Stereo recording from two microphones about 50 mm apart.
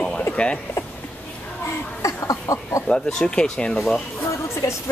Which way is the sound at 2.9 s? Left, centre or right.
Centre.